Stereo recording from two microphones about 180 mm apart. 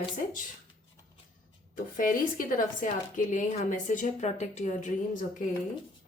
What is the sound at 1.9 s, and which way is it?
A woman's voice, 50° left (ahead or behind).